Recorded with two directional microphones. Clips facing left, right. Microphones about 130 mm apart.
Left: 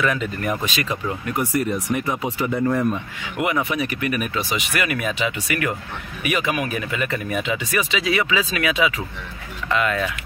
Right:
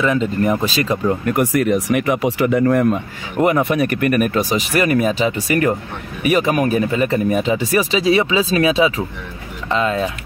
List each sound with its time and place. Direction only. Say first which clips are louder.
0.0 s speech: right 6 dB; 25° right (ahead or behind)
1.2 s speech: right 6 dB; 65° right (ahead or behind)
3.3 s speech: right 7 dB; 40° right (ahead or behind)
3.6 s speech: right 7 dB; 55° right (ahead or behind); by 10.1 s 25° right (ahead or behind)